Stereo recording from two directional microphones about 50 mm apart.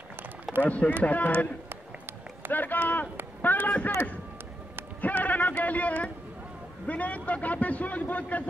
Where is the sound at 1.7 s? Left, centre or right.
Right.